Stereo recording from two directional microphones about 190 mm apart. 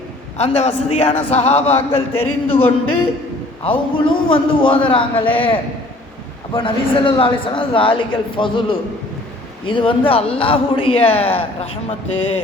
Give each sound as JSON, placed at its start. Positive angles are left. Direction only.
{"t": 0.3, "sound": "a man's voice", "side_deg": 35}